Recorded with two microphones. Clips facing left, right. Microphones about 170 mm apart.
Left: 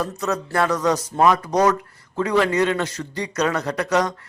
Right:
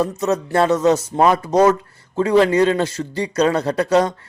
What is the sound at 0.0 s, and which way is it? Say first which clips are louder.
Speech: right 5 dB; 25° right (ahead or behind).